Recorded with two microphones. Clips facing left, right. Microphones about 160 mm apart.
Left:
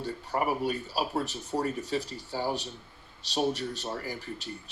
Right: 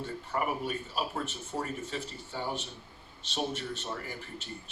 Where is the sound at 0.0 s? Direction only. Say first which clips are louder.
Left 3 dB; 35° left (ahead or behind).